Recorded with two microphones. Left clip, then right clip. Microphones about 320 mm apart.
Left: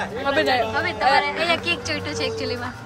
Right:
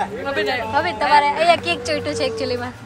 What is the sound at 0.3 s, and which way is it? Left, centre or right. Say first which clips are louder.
Speech: left 4 dB; left.